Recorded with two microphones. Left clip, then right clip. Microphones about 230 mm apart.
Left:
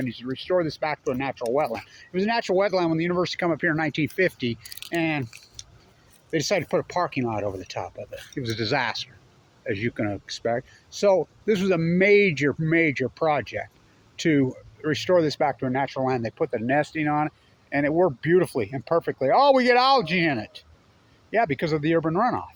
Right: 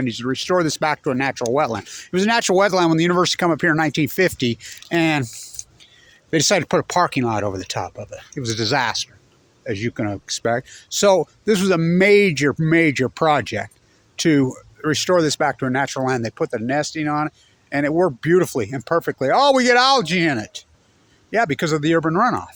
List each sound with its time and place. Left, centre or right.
0.0 s speech: right
6.3 s speech: right